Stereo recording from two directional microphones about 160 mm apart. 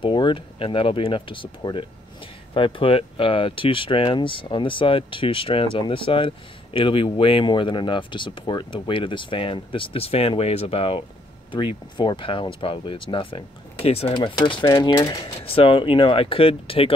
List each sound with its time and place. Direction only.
0.0 s speech: 30° left (ahead or behind)
15.4 s speech: 35° left (ahead or behind)